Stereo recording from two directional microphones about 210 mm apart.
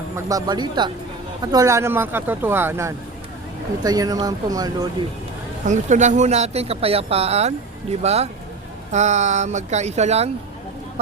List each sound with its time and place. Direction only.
0.3 s speech: 20° right (ahead or behind)
5.6 s speech: 35° right (ahead or behind)